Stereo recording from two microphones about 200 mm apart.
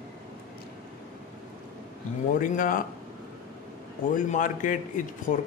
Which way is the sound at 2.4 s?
45° left (ahead or behind).